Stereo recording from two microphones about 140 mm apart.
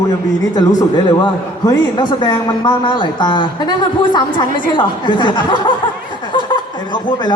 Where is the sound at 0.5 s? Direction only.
25° left (ahead or behind).